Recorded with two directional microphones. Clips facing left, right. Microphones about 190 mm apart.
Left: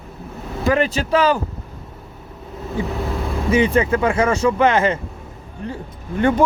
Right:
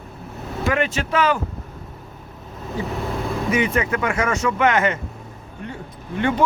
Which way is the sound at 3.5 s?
30° left (ahead or behind).